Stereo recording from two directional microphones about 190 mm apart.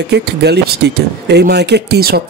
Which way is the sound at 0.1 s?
60° right (ahead or behind).